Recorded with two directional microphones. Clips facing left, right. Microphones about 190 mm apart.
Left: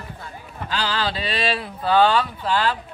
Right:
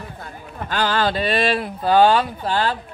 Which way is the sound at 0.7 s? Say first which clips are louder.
Right 5 dB; 55° right (ahead or behind).